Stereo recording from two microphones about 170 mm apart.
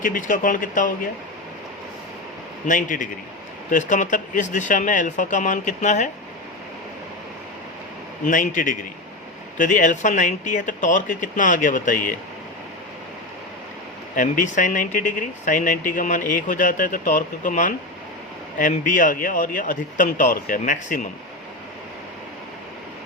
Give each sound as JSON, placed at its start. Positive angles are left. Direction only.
{"t": 0.0, "sound": "speech", "side_deg": 50}
{"t": 2.6, "sound": "speech", "side_deg": 50}
{"t": 8.3, "sound": "speech", "side_deg": 50}
{"t": 14.2, "sound": "speech", "side_deg": 50}